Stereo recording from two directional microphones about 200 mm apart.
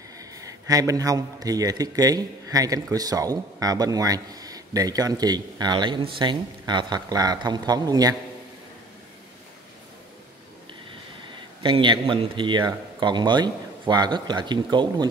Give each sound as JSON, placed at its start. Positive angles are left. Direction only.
{"t": 0.2, "sound": "a man's voice", "side_deg": -15}
{"t": 11.6, "sound": "a man's voice", "side_deg": -25}